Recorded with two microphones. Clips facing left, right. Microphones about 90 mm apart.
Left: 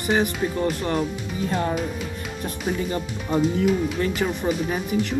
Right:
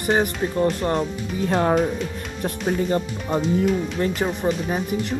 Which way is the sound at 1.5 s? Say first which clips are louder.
Right 6 dB; 55° right (ahead or behind).